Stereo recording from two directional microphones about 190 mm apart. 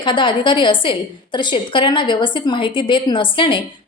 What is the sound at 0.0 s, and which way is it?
A woman's voice, 25° left (ahead or behind).